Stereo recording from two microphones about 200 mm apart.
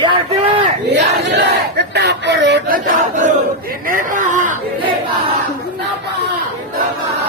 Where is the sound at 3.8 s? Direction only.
40° right (ahead or behind).